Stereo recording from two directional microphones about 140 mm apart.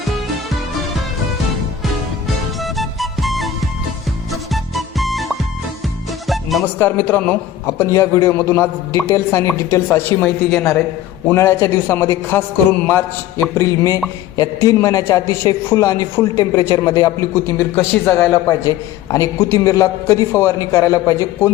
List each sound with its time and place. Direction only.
0.0 s music: centre (ahead or behind)
2.7 s music: centre (ahead or behind)
4.5 s music: centre (ahead or behind)
6.7 s a man's voice: 15° left (ahead or behind)